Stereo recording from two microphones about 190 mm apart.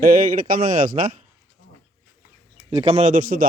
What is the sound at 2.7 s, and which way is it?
Speech, 35° right (ahead or behind).